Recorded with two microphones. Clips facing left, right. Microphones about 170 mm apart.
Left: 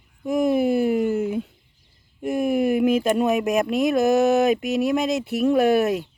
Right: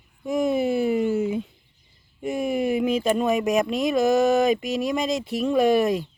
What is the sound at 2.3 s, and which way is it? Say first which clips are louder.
Speech: left 3 dB; 55° left (ahead or behind).